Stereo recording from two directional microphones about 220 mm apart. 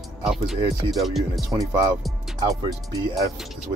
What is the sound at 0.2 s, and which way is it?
Speech, centre (ahead or behind).